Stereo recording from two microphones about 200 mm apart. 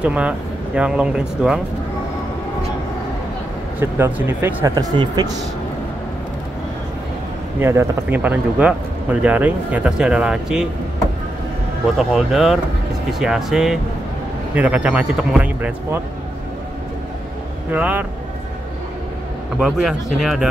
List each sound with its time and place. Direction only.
0.0 s speech: 5° right (ahead or behind)
4.0 s speech: 10° right (ahead or behind)
4.7 s speech: 20° right (ahead or behind)
7.6 s speech: 10° right (ahead or behind)
12.0 s speech: centre (ahead or behind)
17.6 s speech: 5° right (ahead or behind)
19.6 s speech: centre (ahead or behind)